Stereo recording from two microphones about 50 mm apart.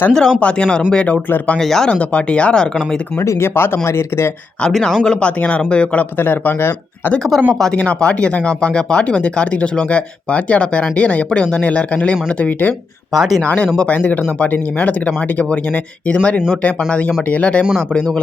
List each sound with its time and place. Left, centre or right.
0.1 s speech: centre
1.5 s speech: centre
1.9 s speech: left
3.2 s speech: left
4.7 s speech: centre
5.0 s speech: left
6.1 s speech: left
7.2 s speech: centre
7.7 s speech: left
13.1 s speech: centre
13.7 s speech: left